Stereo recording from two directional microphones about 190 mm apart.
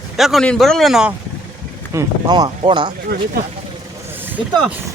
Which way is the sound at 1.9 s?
20° right (ahead or behind).